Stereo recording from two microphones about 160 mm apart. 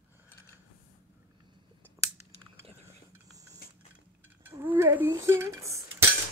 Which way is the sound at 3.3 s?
20° right (ahead or behind).